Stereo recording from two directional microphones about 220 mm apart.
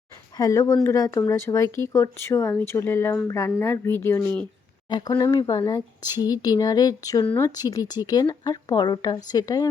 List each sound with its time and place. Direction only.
0.3 s speech: 15° left (ahead or behind)